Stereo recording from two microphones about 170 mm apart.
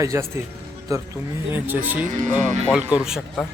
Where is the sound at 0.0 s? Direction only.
15° right (ahead or behind).